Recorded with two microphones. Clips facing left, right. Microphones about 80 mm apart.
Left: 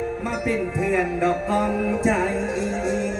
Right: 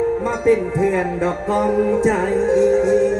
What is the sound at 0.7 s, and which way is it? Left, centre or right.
Music, centre.